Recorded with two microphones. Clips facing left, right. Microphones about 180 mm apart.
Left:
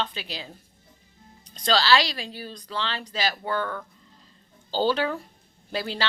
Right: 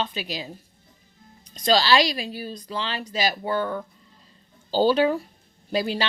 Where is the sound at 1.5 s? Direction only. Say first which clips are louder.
Right 2 dB; 10° right (ahead or behind).